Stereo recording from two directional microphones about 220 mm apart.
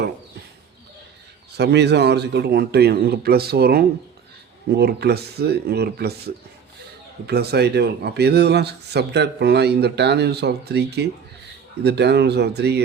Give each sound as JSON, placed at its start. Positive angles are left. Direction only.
{"t": 1.5, "sound": "speech", "side_deg": -50}